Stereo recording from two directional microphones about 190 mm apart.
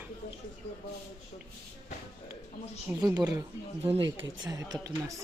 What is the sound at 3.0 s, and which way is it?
Speech, 20° right (ahead or behind).